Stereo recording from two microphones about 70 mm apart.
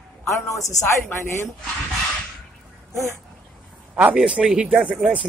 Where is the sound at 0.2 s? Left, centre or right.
Left.